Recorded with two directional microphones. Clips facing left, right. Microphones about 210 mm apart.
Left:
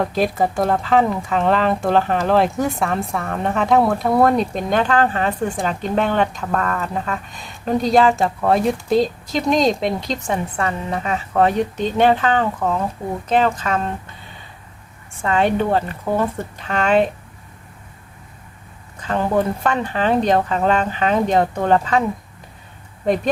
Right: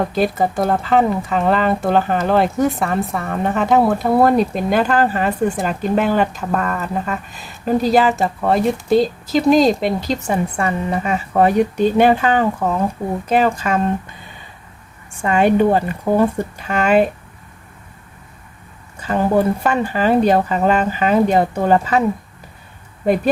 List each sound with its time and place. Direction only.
0.0 s speech: centre (ahead or behind)
15.2 s speech: 10° right (ahead or behind)
18.9 s speech: 5° right (ahead or behind)
23.0 s speech: 5° right (ahead or behind)